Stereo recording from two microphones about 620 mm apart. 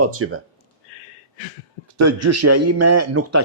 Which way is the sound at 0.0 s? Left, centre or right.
Right.